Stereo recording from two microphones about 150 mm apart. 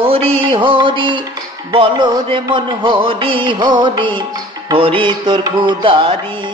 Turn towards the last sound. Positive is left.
turn(degrees=-35)  # may be behind; listen again after turning